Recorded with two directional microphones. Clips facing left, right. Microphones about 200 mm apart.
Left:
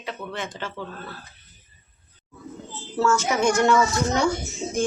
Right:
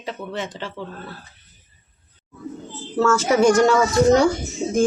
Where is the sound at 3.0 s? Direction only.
90° right.